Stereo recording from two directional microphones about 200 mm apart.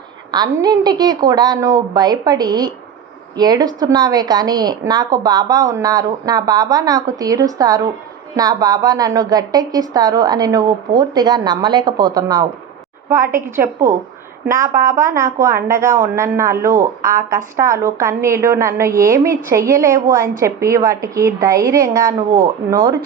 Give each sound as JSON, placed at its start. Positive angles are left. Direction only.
{"t": 0.3, "sound": "a woman's voice", "side_deg": -20}